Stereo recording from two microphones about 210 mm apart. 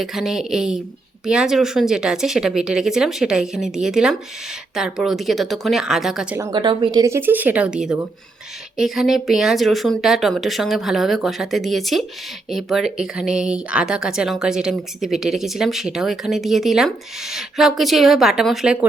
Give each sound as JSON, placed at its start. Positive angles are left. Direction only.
{"t": 0.0, "sound": "speech", "side_deg": 0}
{"t": 6.4, "sound": "speech", "side_deg": -20}